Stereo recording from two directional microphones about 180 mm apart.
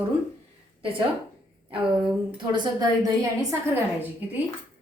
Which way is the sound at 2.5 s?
25° right (ahead or behind).